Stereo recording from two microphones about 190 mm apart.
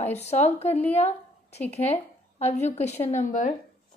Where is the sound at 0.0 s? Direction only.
35° left (ahead or behind).